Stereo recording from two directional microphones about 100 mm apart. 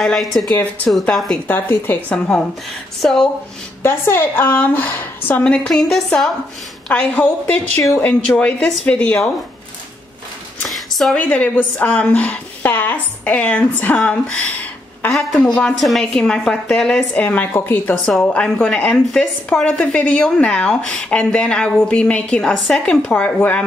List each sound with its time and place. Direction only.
0.0 s a woman's voice: centre (ahead or behind)
1.5 s a woman's voice: 20° left (ahead or behind)
2.0 s a woman's voice: 10° left (ahead or behind)
3.8 s a woman's voice: 25° left (ahead or behind); by 6.3 s 5° left (ahead or behind)
6.9 s a woman's voice: 15° left (ahead or behind)
10.7 s a sound: centre (ahead or behind)
11.1 s a woman's voice: 15° left (ahead or behind)
15.1 s a woman's voice: 5° left (ahead or behind)